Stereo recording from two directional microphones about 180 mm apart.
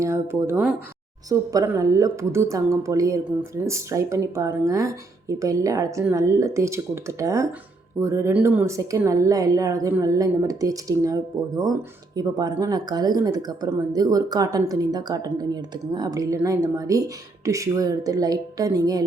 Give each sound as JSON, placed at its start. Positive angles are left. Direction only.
{"t": 0.0, "sound": "a woman's voice", "side_deg": -15}